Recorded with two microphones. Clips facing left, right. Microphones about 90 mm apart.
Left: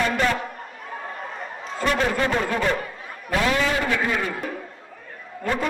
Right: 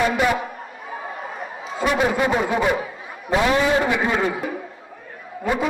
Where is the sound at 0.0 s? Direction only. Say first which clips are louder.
Right 3 dB; 10° right (ahead or behind).